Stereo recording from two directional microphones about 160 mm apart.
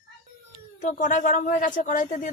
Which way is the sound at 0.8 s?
50° left (ahead or behind).